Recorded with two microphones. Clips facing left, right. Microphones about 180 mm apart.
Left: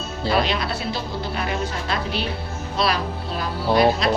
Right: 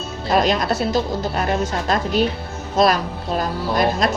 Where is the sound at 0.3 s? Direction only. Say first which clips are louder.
Right 4 dB; 45° right (ahead or behind).